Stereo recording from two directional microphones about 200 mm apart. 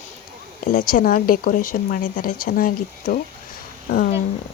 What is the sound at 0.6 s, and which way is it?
Speech, 45° left (ahead or behind).